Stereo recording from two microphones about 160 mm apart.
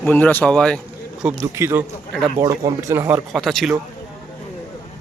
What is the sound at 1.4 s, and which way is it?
A man's voice, 15° right (ahead or behind).